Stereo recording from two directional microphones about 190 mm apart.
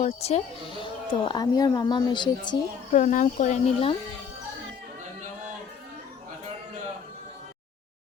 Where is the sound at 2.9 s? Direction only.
40° left (ahead or behind).